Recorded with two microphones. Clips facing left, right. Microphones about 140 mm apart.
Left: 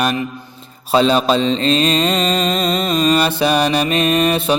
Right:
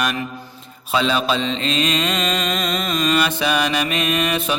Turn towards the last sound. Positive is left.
turn(degrees=35)  # may be behind; listen again after turning